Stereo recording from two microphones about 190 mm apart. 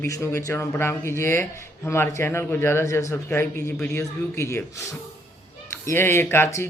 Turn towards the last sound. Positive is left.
turn(degrees=15)  # may be behind; listen again after turning